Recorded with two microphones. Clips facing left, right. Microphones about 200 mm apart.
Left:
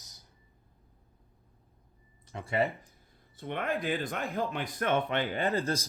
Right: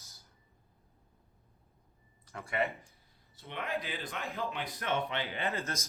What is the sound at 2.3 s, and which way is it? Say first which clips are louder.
Speech: left 4 dB; 25° left (ahead or behind).